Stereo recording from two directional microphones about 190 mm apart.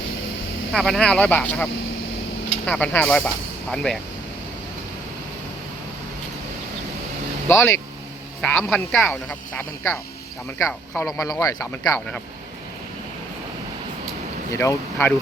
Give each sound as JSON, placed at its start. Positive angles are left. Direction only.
{"t": 0.7, "sound": "speech", "side_deg": 5}
{"t": 7.4, "sound": "a man's voice", "side_deg": 15}
{"t": 11.2, "sound": "speech", "side_deg": 15}
{"t": 14.5, "sound": "speech", "side_deg": 15}